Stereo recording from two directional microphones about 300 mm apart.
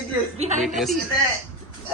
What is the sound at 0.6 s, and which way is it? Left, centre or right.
Speech, centre.